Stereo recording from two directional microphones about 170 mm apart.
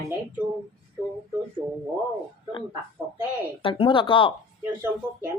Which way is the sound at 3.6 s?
30° left (ahead or behind).